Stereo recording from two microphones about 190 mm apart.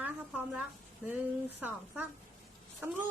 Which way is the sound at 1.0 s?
10° right (ahead or behind).